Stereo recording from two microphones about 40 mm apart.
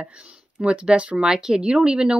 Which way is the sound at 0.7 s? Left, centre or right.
Right.